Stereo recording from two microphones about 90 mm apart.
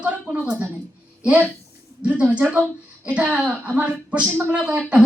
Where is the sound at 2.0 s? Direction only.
15° right (ahead or behind).